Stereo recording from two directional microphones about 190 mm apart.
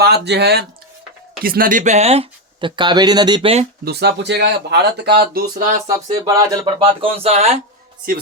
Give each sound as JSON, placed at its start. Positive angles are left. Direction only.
{"t": 0.0, "sound": "speech", "side_deg": -60}
{"t": 1.5, "sound": "speech", "side_deg": -50}
{"t": 3.8, "sound": "speech", "side_deg": -60}
{"t": 6.1, "sound": "speech", "side_deg": -20}